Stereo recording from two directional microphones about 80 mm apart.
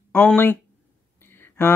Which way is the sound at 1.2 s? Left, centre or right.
Left.